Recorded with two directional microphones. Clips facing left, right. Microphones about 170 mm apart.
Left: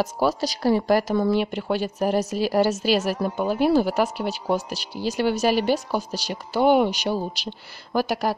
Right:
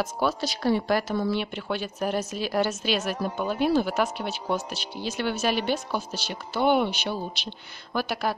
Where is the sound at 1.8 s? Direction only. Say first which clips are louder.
Left 5 dB; 35° left (ahead or behind).